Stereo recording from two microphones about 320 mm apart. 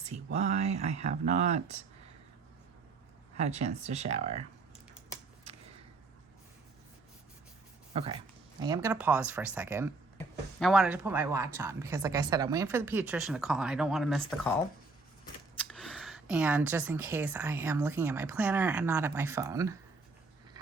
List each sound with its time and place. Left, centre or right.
0.3 s speech: right
3.3 s speech: right
7.9 s speech: centre